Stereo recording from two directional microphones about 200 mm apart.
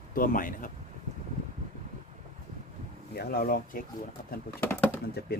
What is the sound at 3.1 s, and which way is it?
Speech, 50° left (ahead or behind).